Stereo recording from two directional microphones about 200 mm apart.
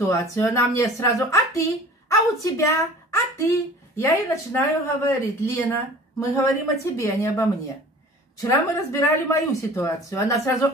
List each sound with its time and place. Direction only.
0.0 s a woman's voice: 15° left (ahead or behind)